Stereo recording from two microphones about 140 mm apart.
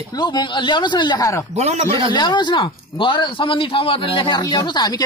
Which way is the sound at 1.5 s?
50° right (ahead or behind).